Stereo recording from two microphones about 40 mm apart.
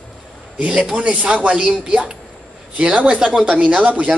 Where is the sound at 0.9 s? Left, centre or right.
Right.